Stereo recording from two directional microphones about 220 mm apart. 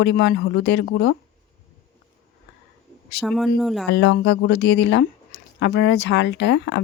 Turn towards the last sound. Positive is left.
turn(degrees=50)  # may be behind; listen again after turning